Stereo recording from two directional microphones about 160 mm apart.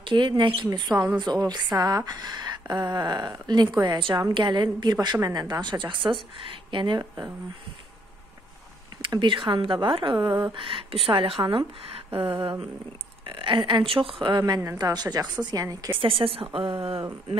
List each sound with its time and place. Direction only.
0.0 s a woman's voice: 30° right (ahead or behind)
8.9 s a woman's voice: 30° right (ahead or behind)
16.0 s speech: 35° right (ahead or behind)